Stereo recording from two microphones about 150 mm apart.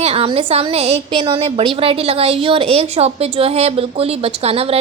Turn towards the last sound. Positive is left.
turn(degrees=-40)  # may be behind; listen again after turning